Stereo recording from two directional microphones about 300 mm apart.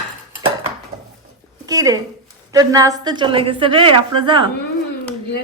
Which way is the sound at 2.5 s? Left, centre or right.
Centre.